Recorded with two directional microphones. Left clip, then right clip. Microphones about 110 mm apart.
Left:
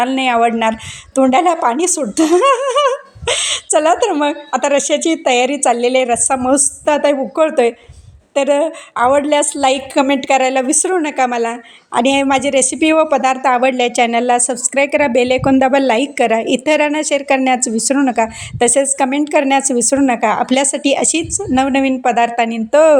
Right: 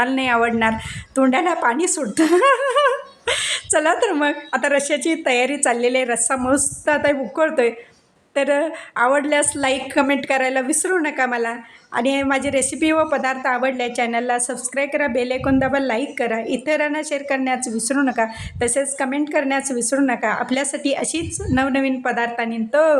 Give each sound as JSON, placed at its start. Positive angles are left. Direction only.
{"t": 0.0, "sound": "a woman's voice", "side_deg": 30}
{"t": 11.9, "sound": "a woman's voice", "side_deg": 50}